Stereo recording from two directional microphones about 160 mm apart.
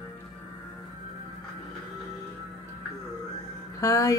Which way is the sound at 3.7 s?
20° left (ahead or behind).